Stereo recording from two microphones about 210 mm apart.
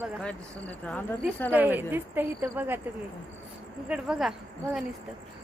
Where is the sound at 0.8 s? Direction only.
10° left (ahead or behind).